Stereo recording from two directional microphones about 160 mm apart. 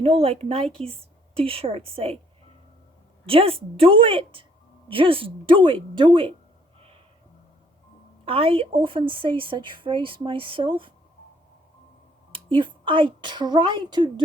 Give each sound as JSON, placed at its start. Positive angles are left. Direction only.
{"t": 0.0, "sound": "a woman's voice", "side_deg": -35}
{"t": 3.2, "sound": "a woman's voice", "side_deg": -35}
{"t": 6.7, "sound": "a sound", "side_deg": -40}
{"t": 8.2, "sound": "a woman's voice", "side_deg": -35}
{"t": 12.3, "sound": "a woman's voice", "side_deg": -30}